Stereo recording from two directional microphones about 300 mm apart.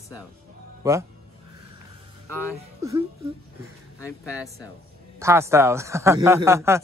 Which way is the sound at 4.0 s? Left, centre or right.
Centre.